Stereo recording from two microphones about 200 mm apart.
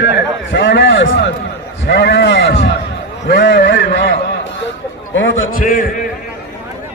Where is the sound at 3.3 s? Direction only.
60° left (ahead or behind).